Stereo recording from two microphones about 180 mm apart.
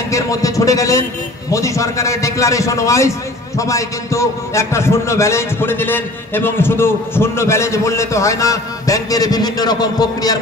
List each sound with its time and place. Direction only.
0.1 s a man's voice: 20° left (ahead or behind)